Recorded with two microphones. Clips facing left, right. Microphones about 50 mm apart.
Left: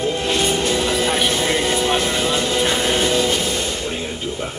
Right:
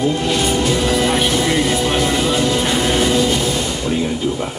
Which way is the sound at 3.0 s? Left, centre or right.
Right.